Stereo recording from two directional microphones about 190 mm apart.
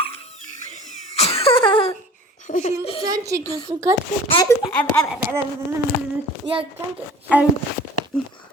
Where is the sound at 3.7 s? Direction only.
15° right (ahead or behind).